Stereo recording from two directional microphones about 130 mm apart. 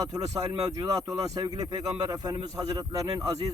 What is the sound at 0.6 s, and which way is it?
A man's voice, 25° right (ahead or behind).